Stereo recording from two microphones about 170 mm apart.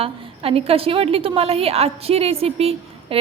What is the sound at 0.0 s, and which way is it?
A woman's voice, 35° right (ahead or behind).